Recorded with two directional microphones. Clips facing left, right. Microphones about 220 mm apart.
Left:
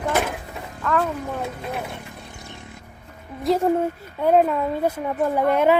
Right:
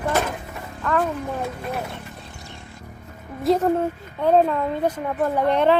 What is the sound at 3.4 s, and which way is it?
Speech, 5° left (ahead or behind).